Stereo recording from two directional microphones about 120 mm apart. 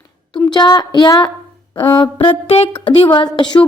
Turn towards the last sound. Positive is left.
turn(degrees=40)  # may be behind; listen again after turning